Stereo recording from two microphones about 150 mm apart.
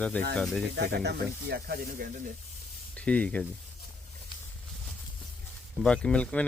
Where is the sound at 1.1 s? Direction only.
90° right; by 2.3 s 65° right (ahead or behind).